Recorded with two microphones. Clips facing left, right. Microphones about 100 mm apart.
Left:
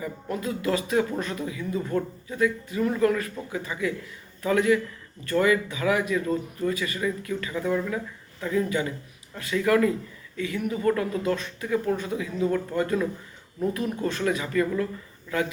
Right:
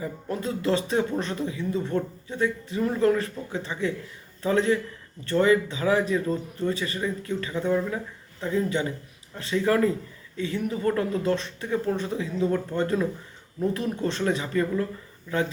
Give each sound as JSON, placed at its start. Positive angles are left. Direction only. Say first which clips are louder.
{"t": 0.0, "sound": "speech", "louder": "even", "side_deg": -30}